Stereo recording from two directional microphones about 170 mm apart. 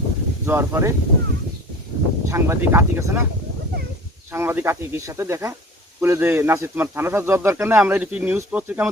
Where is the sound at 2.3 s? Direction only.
15° right (ahead or behind).